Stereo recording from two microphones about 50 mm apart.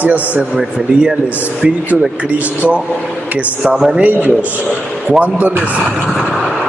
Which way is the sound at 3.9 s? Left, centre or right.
Right.